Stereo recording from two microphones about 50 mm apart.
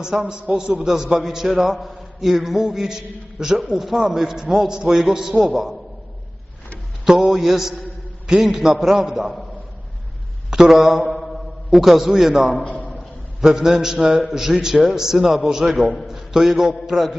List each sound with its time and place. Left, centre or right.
0.0 s a man's voice: centre
7.0 s a man's voice: centre
10.5 s mantra: centre
11.7 s a man's voice: centre